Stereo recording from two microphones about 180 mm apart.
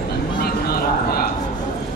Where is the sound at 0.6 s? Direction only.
60° left (ahead or behind).